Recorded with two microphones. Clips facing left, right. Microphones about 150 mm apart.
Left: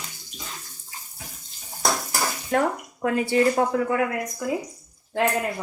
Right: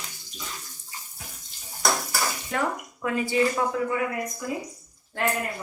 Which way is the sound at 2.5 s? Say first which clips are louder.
Left 5 dB; 50° left (ahead or behind).